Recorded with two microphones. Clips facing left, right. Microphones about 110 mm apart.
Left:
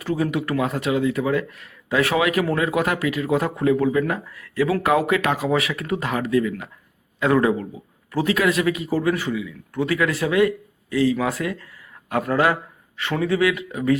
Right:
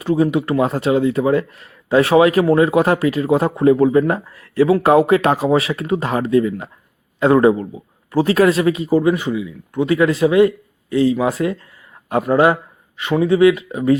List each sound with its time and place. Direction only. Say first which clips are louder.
0.0 s speech: right 7 dB; 25° right (ahead or behind)